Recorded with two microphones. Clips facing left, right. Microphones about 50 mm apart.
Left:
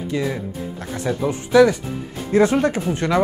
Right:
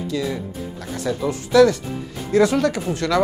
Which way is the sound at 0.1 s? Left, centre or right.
Left.